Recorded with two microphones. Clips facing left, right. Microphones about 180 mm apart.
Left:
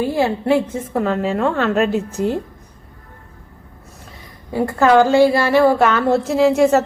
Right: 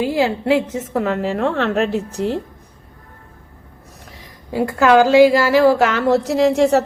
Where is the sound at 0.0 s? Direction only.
90° right.